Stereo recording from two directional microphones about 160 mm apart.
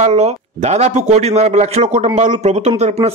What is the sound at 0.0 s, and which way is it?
A man's voice, 40° right (ahead or behind).